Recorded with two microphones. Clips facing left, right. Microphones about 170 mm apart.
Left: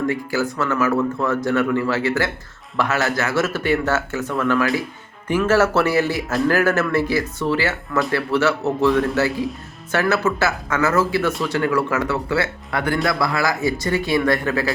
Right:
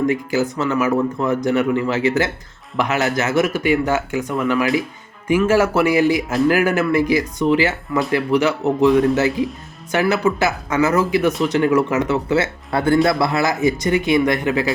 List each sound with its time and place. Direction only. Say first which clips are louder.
0.0 s speech: right 3 dB; 20° right (ahead or behind)